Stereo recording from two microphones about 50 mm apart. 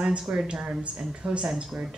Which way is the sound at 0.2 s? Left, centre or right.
Centre.